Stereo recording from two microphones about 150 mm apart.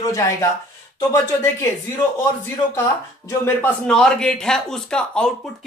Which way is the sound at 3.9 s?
5° left (ahead or behind).